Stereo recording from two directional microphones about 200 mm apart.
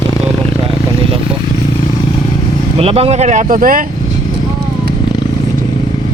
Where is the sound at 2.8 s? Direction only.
30° right (ahead or behind).